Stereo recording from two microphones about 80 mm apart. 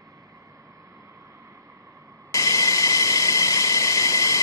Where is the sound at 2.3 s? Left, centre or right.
Left.